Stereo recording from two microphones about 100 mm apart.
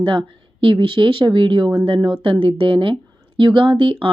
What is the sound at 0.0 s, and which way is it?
Speech, 55° right (ahead or behind).